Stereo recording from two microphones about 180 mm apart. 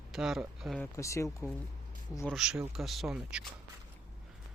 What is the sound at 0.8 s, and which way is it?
Speech, 15° left (ahead or behind).